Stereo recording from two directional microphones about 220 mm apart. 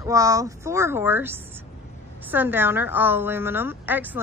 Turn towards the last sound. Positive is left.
turn(degrees=-10)  # may be behind; listen again after turning